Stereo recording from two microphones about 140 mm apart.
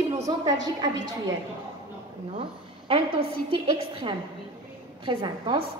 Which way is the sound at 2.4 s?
40° right (ahead or behind).